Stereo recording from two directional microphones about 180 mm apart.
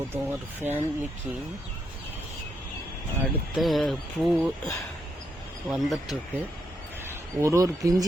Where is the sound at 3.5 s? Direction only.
Centre (ahead or behind).